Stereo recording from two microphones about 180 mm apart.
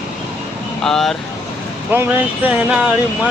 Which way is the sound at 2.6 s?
5° right (ahead or behind).